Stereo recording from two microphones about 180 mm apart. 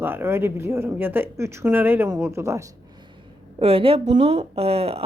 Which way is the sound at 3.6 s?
30° right (ahead or behind).